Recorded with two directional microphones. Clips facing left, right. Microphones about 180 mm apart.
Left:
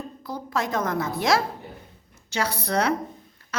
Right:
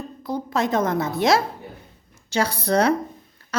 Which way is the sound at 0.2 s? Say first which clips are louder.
Right 5 dB; 25° right (ahead or behind).